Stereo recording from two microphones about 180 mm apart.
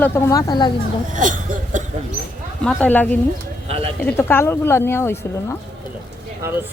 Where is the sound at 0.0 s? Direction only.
20° left (ahead or behind).